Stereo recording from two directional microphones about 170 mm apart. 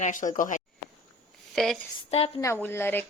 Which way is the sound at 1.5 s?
Centre (ahead or behind).